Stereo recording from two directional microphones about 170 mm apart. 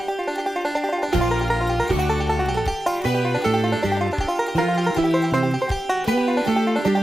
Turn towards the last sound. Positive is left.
turn(degrees=0)  # may be behind; listen again after turning